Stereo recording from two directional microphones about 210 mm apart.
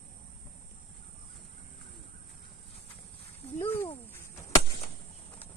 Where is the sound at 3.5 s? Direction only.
10° left (ahead or behind).